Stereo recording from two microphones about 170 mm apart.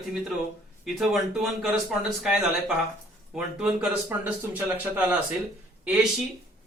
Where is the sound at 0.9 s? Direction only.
Centre (ahead or behind).